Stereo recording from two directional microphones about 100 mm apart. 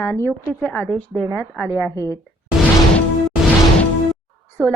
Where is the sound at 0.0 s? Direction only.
25° left (ahead or behind).